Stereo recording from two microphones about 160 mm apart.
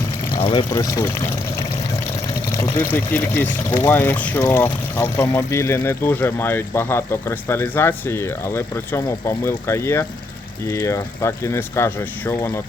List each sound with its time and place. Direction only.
0.3 s speech: 30° left (ahead or behind); by 12.6 s 15° left (ahead or behind)